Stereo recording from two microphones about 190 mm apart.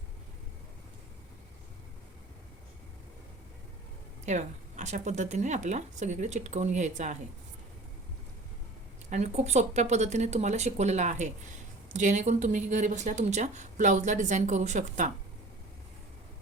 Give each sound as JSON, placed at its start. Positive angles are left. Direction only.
{"t": 4.3, "sound": "speech", "side_deg": -40}
{"t": 9.0, "sound": "speech", "side_deg": -35}